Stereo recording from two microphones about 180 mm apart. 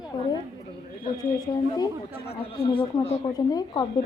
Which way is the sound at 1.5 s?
20° left (ahead or behind).